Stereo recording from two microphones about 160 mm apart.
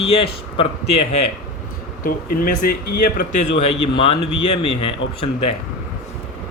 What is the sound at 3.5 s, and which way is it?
Speech, 35° left (ahead or behind).